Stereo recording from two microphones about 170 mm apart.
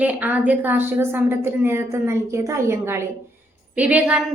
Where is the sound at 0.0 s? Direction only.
10° right (ahead or behind).